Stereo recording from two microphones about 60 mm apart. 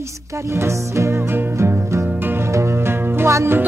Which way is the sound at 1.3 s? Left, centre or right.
Right.